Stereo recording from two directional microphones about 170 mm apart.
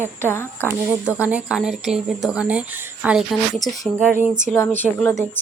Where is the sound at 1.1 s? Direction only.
10° right (ahead or behind).